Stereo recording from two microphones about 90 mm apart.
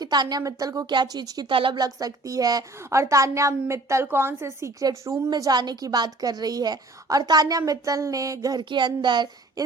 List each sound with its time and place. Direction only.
0.0 s a woman's voice: 50° right (ahead or behind)
1.5 s speech: 70° right (ahead or behind)
1.8 s a woman's voice: 45° right (ahead or behind)
5.3 s a woman's voice: 50° right (ahead or behind)
8.7 s a child's voice: 55° right (ahead or behind)